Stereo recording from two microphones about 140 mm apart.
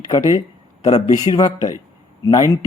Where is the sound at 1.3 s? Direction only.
25° left (ahead or behind).